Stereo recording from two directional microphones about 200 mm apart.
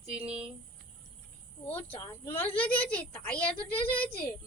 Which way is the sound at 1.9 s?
10° left (ahead or behind).